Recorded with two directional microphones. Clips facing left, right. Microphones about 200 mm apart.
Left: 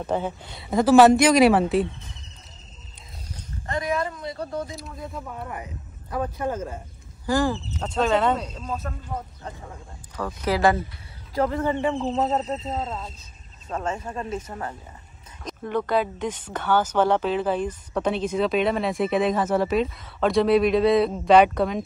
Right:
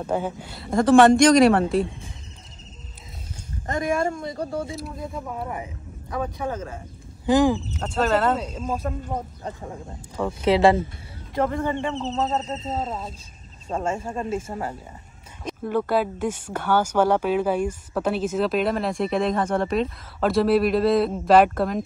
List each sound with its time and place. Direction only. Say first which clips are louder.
0.0 s speech: right 1 dB; 10° right (ahead or behind)
3.6 s speech: right 3 dB; 50° right (ahead or behind)
4.4 s speech: right 2 dB; 10° right (ahead or behind); by 6.8 s 10° left (ahead or behind)
7.2 s speech: right 5 dB; 20° right (ahead or behind)
8.8 s a man's voice: right 5 dB; 30° right (ahead or behind)
11.3 s speech: even; centre (ahead or behind)
12.6 s speech: right 1 dB; 20° right (ahead or behind)
15.4 s speech: right 2 dB; 5° right (ahead or behind)